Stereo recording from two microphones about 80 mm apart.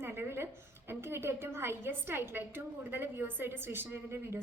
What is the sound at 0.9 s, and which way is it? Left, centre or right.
A woman's voice, right.